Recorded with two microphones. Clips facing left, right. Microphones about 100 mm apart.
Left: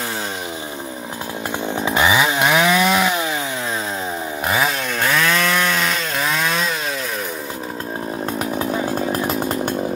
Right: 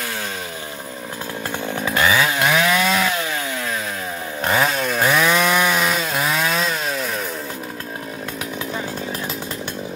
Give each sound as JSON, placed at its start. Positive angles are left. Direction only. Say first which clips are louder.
{"t": 1.7, "sound": "chainsaw", "louder": "left 2 dB", "side_deg": 20}
{"t": 4.5, "sound": "chainsaw", "louder": "right 2 dB", "side_deg": 5}
{"t": 5.0, "sound": "chainsaw", "louder": "right 1 dB", "side_deg": -10}
{"t": 8.5, "sound": "chainsaw", "louder": "left 6 dB", "side_deg": 45}